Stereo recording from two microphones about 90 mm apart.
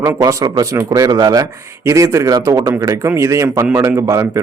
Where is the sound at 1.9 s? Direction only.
35° right (ahead or behind).